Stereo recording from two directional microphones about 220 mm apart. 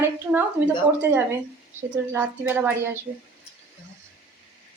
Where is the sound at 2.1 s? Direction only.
10° right (ahead or behind).